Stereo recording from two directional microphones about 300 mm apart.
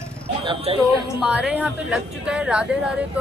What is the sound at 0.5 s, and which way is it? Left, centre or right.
Speech, centre.